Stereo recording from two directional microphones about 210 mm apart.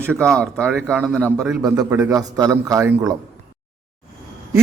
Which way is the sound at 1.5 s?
10° right (ahead or behind).